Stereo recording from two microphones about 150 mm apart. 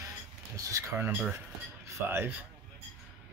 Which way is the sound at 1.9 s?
15° right (ahead or behind).